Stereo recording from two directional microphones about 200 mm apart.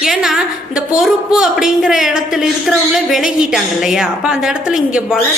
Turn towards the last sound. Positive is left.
turn(degrees=-5)  # may be behind; listen again after turning